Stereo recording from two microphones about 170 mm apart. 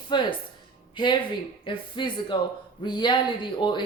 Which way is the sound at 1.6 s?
30° left (ahead or behind).